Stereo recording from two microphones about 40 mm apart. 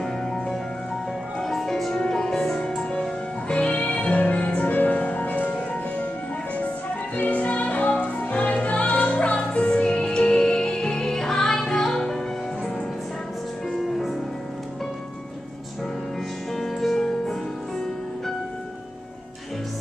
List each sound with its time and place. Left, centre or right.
0.0 s music: centre
2.0 s music: centre; by 5.3 s left
5.3 s music: left
7.2 s music: left; by 12.2 s centre
13.8 s music: centre
16.5 s music: centre